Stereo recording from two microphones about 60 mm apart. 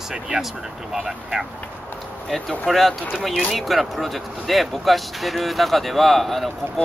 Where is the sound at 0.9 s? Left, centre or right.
Centre.